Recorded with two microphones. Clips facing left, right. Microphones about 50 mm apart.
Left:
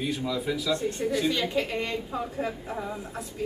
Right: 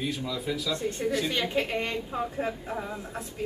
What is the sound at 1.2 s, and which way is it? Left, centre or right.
Speech, centre.